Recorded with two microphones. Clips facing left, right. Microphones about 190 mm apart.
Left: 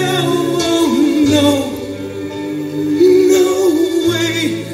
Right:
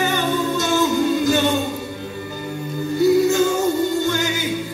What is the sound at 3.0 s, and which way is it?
Music, 75° left (ahead or behind).